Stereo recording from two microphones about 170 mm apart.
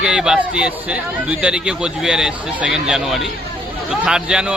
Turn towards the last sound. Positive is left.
turn(degrees=-5)  # may be behind; listen again after turning